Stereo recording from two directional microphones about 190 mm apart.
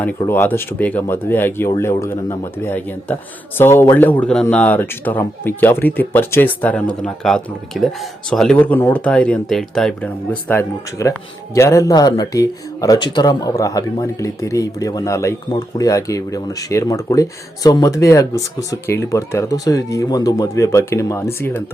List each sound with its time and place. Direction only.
0.3 s speech: 10° left (ahead or behind)
10.5 s speech: 15° left (ahead or behind)